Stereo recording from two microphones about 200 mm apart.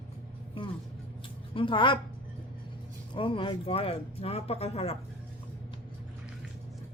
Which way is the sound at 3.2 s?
25° left (ahead or behind).